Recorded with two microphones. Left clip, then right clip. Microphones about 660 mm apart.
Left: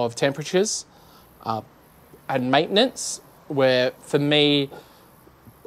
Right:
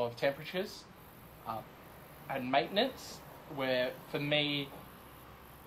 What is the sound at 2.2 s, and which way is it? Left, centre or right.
Speech, left.